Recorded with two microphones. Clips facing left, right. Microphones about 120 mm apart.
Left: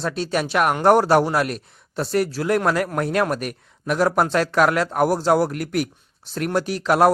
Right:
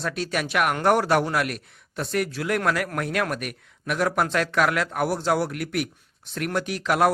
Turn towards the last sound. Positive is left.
turn(degrees=35)  # may be behind; listen again after turning